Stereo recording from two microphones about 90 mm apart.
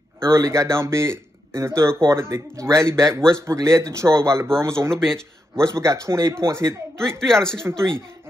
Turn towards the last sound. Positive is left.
turn(degrees=5)  # may be behind; listen again after turning